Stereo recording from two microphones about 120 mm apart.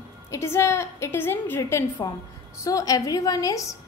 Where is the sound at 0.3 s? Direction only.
20° left (ahead or behind).